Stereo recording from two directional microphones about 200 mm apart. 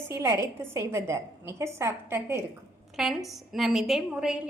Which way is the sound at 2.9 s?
Centre (ahead or behind).